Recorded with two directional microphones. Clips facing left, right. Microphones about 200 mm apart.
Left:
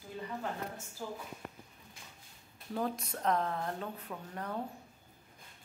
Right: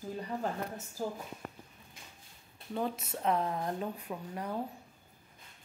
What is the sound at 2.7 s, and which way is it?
Speech, centre (ahead or behind).